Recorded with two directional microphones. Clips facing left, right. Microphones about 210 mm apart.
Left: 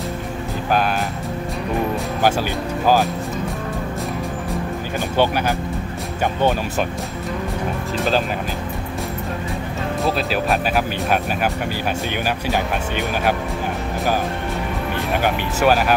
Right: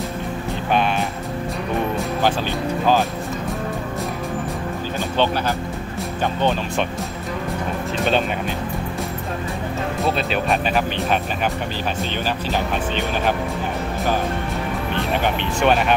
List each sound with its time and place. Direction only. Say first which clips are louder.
5.1 s speech: left 2 dB; 10° left (ahead or behind)
10.0 s speech: left 1 dB; centre (ahead or behind)
15.1 s speech: left 3 dB; 5° left (ahead or behind)